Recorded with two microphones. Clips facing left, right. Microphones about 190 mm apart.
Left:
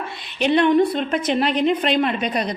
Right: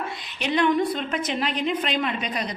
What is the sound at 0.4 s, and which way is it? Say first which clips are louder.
A woman's voice: left 6 dB; 60° left (ahead or behind).